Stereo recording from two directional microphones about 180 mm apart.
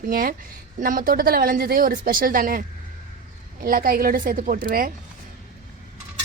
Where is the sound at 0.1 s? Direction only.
50° right (ahead or behind).